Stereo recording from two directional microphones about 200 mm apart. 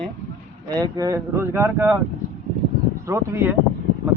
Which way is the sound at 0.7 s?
20° right (ahead or behind).